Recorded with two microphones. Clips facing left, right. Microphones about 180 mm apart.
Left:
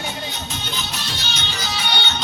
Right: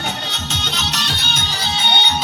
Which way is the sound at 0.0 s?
75° right (ahead or behind).